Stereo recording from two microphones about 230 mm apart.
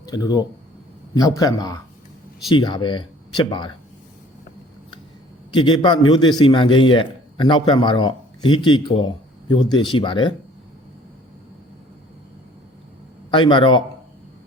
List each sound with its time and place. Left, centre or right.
0.0 s a man's voice: centre
5.5 s a man's voice: centre
13.3 s a man's voice: left